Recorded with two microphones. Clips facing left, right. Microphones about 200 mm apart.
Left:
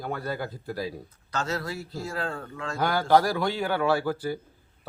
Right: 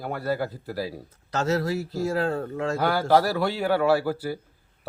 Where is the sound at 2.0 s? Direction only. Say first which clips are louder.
Right 8 dB; 40° right (ahead or behind).